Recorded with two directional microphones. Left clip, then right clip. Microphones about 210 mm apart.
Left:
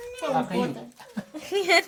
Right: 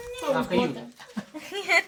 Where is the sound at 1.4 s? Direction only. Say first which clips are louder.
Left 2 dB; 65° left (ahead or behind).